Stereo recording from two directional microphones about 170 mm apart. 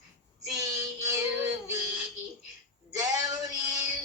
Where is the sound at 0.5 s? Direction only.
20° right (ahead or behind).